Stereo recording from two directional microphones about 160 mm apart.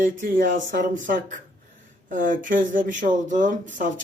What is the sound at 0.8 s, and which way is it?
Speech, 55° right (ahead or behind).